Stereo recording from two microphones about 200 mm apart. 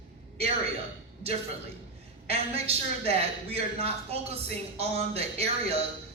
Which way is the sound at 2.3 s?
30° right (ahead or behind).